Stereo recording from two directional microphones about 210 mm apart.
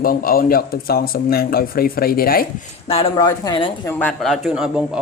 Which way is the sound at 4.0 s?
Centre (ahead or behind).